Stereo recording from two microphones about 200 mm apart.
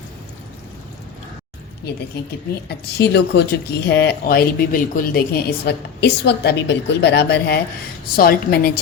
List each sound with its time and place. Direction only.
2.6 s speech: 55° left (ahead or behind)